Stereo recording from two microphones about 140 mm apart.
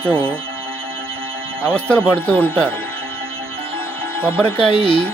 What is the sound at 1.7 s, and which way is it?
Speech, 10° left (ahead or behind).